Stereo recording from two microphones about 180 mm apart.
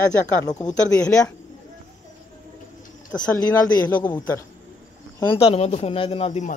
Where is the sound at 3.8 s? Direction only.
10° left (ahead or behind).